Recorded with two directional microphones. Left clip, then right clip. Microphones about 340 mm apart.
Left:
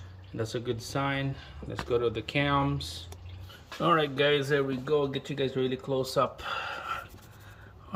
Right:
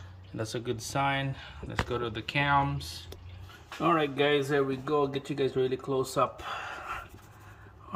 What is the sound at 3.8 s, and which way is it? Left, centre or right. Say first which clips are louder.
Speech: left 1 dB; centre.